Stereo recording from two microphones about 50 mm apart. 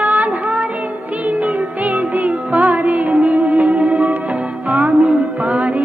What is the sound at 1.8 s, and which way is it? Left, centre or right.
Music, right.